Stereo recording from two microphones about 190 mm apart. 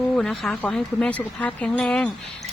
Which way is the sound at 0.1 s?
5° left (ahead or behind).